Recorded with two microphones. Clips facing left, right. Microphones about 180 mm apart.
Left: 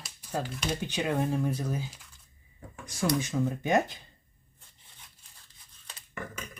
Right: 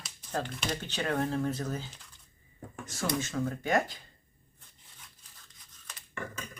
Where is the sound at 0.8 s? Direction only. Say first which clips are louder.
Left 2 dB; 15° left (ahead or behind).